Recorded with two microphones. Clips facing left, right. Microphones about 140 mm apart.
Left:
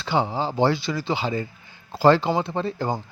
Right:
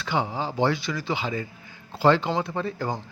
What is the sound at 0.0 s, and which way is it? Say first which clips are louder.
A man's voice: left 3 dB; 30° left (ahead or behind).